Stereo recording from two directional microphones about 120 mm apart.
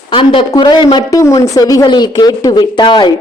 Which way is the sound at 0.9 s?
25° left (ahead or behind).